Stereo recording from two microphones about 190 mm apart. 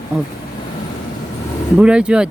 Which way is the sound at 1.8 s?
5° right (ahead or behind).